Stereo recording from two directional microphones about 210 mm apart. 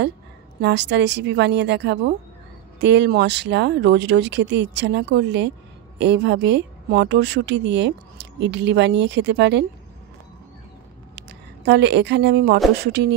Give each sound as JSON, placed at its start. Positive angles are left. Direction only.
{"t": 0.6, "sound": "a woman's voice", "side_deg": -55}
{"t": 11.1, "sound": "a woman's voice", "side_deg": -55}